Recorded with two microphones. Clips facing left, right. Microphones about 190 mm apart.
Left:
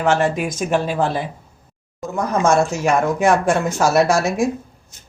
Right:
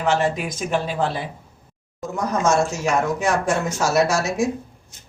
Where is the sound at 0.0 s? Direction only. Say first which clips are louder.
Left 3 dB; 50° left (ahead or behind).